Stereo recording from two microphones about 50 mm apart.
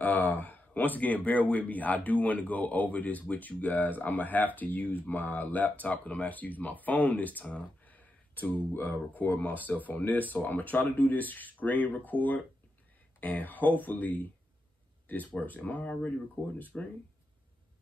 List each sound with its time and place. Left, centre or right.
0.0 s speech: left
16.7 s speech: centre